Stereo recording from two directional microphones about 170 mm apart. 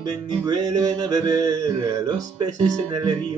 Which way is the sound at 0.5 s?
20° right (ahead or behind).